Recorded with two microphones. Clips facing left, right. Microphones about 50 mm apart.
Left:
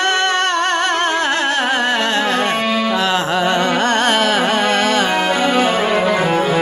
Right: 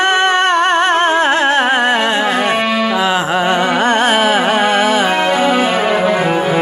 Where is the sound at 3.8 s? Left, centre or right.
Centre.